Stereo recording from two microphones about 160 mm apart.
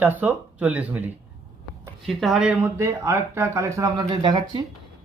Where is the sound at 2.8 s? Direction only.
15° right (ahead or behind).